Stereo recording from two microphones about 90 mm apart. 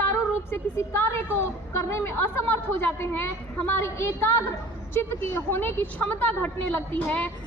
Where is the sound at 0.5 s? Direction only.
30° left (ahead or behind).